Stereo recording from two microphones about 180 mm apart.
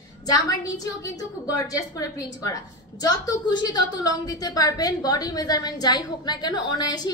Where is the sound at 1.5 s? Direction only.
20° left (ahead or behind).